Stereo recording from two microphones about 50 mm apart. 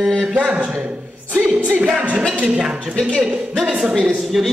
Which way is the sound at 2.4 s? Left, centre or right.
Centre.